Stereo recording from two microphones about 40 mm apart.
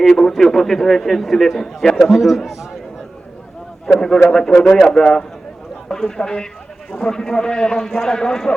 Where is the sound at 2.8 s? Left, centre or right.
Centre.